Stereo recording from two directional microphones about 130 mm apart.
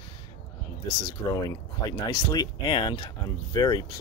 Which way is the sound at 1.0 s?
30° left (ahead or behind).